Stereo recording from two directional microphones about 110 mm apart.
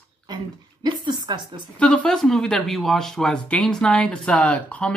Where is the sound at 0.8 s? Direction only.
45° right (ahead or behind).